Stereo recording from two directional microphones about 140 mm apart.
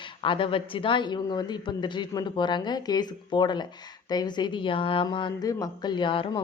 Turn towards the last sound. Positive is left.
turn(degrees=35)  # may be behind; listen again after turning